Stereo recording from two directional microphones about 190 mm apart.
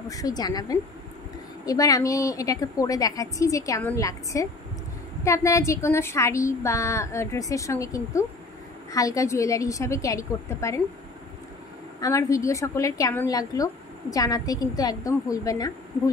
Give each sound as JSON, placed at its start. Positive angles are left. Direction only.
{"t": 0.1, "sound": "a woman's voice", "side_deg": 20}
{"t": 12.0, "sound": "a woman's voice", "side_deg": 15}